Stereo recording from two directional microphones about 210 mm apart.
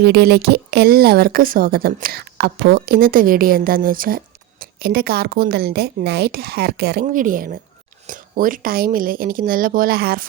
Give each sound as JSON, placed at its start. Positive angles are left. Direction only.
{"t": 0.0, "sound": "speech", "side_deg": -50}
{"t": 7.0, "sound": "speech", "side_deg": -40}